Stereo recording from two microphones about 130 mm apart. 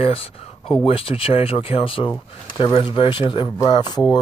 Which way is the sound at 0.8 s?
45° left (ahead or behind).